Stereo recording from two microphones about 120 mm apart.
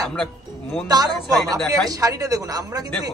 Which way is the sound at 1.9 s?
30° right (ahead or behind).